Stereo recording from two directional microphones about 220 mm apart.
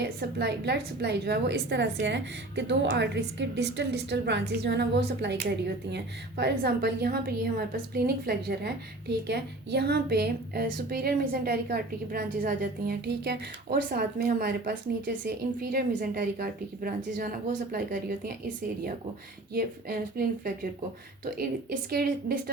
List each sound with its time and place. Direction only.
0.0 s a woman's voice: 50° right (ahead or behind)
19.5 s a woman's voice: 45° right (ahead or behind)